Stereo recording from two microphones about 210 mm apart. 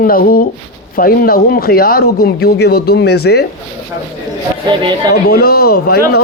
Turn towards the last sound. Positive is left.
turn(degrees=50)  # may be behind; listen again after turning